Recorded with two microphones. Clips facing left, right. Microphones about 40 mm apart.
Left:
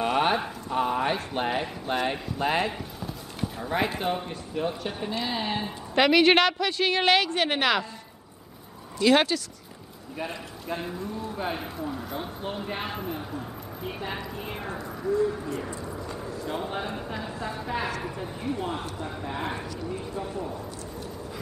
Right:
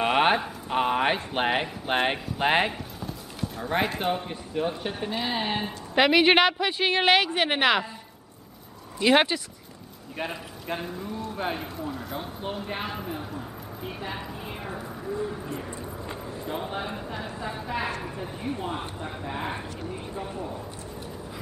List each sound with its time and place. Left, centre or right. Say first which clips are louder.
0.0 s a sound: right 2 dB; right
0.7 s speech: right 2 dB; right
2.7 s clip-clop: even; centre
4.0 s a woman's voice: right 1 dB; centre
8.9 s a woman's voice: even; right
11.5 s speech: even; centre
14.8 s speech: left 7 dB; centre
16.4 s speech: even; centre
17.2 s a woman's voice: even; centre